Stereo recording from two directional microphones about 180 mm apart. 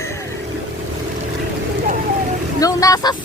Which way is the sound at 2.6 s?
20° left (ahead or behind).